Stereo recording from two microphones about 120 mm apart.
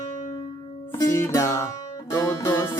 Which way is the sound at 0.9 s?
25° left (ahead or behind).